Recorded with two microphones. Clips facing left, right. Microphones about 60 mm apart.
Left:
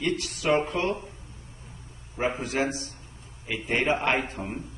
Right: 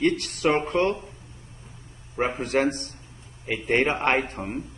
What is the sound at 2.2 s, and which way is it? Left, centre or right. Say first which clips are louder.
Speech: right 4 dB; right.